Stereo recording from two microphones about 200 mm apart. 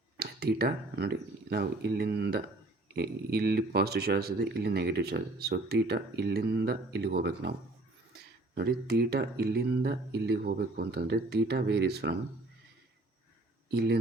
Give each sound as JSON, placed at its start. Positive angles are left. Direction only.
{"t": 0.2, "sound": "speech", "side_deg": -50}
{"t": 13.7, "sound": "speech", "side_deg": -55}